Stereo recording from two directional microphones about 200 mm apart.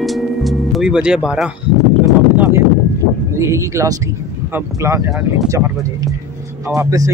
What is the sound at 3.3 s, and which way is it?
Speech, 15° right (ahead or behind).